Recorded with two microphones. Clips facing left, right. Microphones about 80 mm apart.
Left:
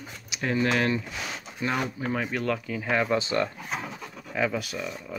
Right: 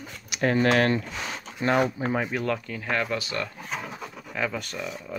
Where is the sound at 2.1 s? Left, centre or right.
Centre.